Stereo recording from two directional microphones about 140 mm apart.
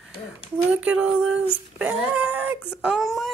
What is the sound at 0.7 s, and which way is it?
Speech, 10° right (ahead or behind).